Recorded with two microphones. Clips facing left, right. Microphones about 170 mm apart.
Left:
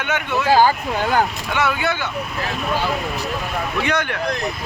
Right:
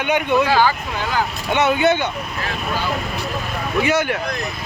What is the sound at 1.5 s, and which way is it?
Speech, 20° right (ahead or behind).